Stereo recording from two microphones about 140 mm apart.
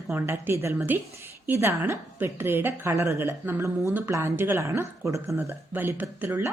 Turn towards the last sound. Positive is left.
turn(degrees=-15)  # may be behind; listen again after turning